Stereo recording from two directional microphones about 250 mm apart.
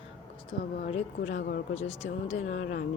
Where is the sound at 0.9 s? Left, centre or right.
Left.